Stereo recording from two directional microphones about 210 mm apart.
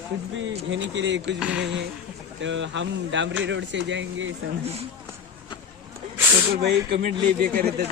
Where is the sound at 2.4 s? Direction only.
60° right (ahead or behind).